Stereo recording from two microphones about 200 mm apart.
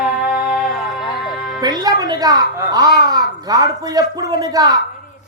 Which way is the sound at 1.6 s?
20° right (ahead or behind).